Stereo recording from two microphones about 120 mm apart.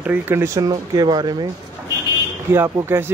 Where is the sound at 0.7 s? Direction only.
35° right (ahead or behind).